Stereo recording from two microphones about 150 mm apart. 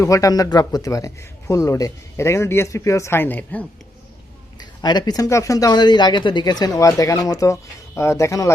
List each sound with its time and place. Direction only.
0.0 s speech: 20° left (ahead or behind)
4.8 s speech: 25° left (ahead or behind)